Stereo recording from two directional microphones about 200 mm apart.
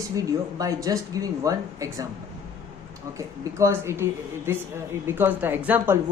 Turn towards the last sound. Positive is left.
turn(degrees=-10)  # may be behind; listen again after turning